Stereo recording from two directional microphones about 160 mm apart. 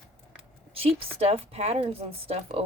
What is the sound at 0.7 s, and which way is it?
A woman's voice, 35° right (ahead or behind).